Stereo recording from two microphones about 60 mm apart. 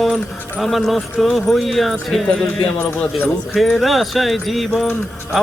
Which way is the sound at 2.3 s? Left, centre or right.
Centre.